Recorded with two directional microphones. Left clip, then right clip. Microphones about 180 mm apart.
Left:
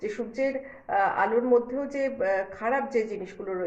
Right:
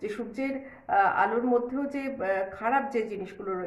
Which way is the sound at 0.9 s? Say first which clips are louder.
Even; 25° right (ahead or behind).